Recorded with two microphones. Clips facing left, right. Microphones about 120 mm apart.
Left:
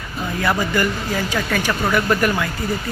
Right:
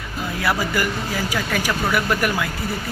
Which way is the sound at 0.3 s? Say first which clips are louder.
Left 2 dB; 5° right (ahead or behind).